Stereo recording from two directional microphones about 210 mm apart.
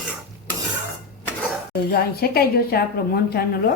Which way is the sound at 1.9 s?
45° left (ahead or behind).